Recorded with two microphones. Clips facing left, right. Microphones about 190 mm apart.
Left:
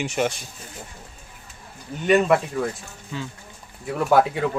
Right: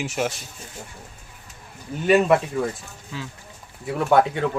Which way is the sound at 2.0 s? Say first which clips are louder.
Right 1 dB; centre (ahead or behind).